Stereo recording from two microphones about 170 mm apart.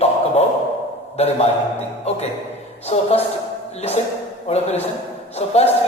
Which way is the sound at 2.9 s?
40° left (ahead or behind).